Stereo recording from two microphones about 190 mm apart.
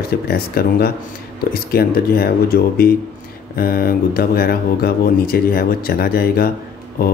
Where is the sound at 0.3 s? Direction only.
55° left (ahead or behind).